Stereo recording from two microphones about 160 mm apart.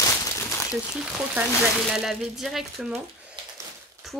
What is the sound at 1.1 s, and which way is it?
Speech, 5° right (ahead or behind).